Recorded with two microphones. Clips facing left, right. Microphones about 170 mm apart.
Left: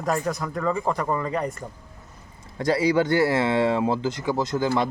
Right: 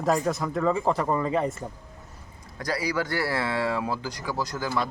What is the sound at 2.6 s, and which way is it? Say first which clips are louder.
Speech: left 7 dB; 25° left (ahead or behind).